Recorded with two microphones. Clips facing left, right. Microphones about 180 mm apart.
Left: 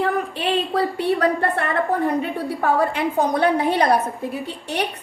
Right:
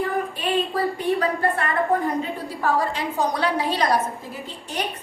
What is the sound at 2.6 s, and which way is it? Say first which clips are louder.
A woman's voice: left 3 dB; 60° left (ahead or behind).